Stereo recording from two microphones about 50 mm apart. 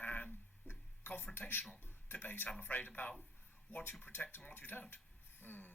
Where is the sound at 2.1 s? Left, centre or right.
Left.